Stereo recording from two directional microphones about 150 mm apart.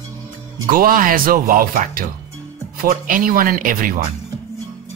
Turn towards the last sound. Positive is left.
turn(degrees=-65)  # may be behind; listen again after turning